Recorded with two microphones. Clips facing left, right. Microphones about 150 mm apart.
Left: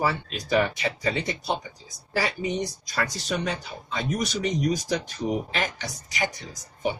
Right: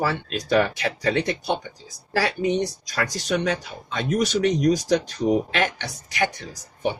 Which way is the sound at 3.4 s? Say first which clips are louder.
Right 5 dB; 75° right (ahead or behind).